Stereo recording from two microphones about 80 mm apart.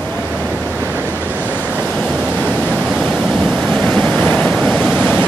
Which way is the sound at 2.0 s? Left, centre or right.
Centre.